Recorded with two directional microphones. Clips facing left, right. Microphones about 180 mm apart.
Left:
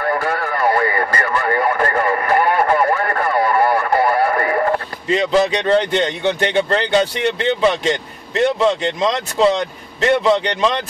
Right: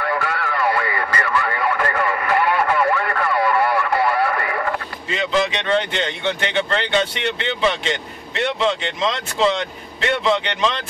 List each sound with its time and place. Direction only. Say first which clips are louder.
0.0 s radio: left 3 dB; 40° left (ahead or behind)